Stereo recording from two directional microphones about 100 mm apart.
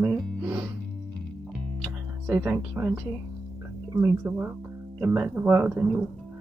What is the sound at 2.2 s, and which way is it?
Speech, 25° right (ahead or behind).